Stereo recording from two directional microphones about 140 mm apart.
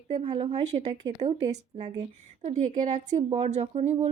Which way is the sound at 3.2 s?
40° right (ahead or behind).